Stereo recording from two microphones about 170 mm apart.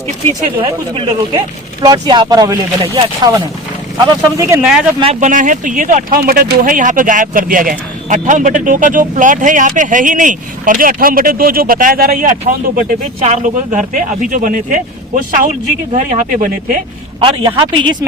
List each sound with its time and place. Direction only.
0.6 s speech: 30° right (ahead or behind)
4.6 s speech: 5° right (ahead or behind)
5.2 s speech: 50° right (ahead or behind)
17.2 s speech: 30° right (ahead or behind)